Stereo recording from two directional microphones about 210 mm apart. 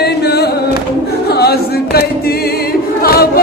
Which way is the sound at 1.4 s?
50° left (ahead or behind).